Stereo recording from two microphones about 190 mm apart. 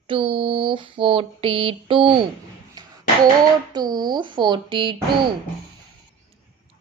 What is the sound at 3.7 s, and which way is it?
A woman's voice, 20° right (ahead or behind).